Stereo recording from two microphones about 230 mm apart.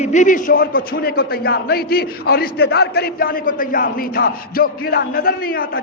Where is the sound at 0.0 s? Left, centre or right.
Left.